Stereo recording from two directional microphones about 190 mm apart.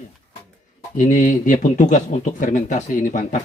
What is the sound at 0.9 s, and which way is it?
Speech, 40° left (ahead or behind).